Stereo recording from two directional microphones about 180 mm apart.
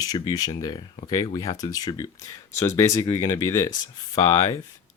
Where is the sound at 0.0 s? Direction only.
20° left (ahead or behind).